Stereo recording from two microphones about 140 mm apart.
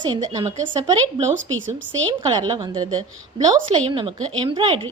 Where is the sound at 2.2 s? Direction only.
35° right (ahead or behind).